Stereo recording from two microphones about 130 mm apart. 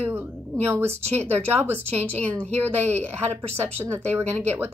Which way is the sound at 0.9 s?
55° right (ahead or behind).